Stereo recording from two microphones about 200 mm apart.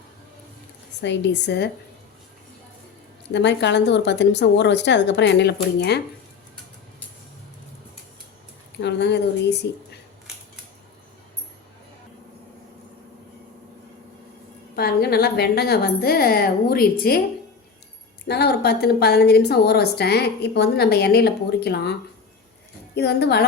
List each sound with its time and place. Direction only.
1.0 s a woman's voice: 60° left (ahead or behind)
3.3 s a woman's voice: 60° left (ahead or behind)
8.8 s a woman's voice: 60° left (ahead or behind)
14.8 s a woman's voice: 50° left (ahead or behind)
18.3 s a woman's voice: 55° left (ahead or behind)
23.0 s a woman's voice: 55° left (ahead or behind)